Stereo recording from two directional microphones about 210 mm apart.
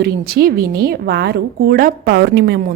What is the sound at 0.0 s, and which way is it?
Speech, 45° right (ahead or behind).